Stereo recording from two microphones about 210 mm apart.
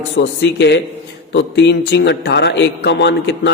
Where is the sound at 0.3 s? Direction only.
55° left (ahead or behind).